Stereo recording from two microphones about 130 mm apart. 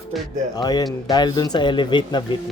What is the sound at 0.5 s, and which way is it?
Speech, 30° left (ahead or behind).